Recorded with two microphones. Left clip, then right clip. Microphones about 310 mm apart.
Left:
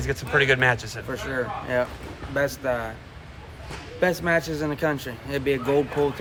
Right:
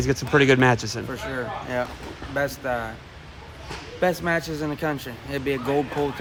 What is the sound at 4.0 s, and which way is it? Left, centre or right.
Speech, centre.